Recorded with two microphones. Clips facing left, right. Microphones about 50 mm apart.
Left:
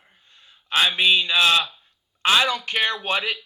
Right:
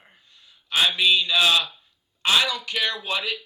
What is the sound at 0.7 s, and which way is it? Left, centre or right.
Speech, left.